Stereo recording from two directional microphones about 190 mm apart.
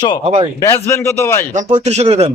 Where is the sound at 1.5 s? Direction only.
40° right (ahead or behind).